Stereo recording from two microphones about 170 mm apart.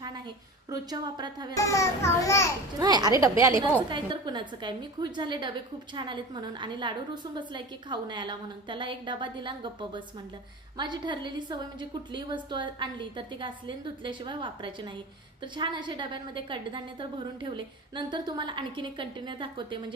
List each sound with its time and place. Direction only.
0.7 s a woman's voice: 25° right (ahead or behind)
1.5 s a child's voice: 20° left (ahead or behind)
2.7 s a woman's voice: 25° right (ahead or behind)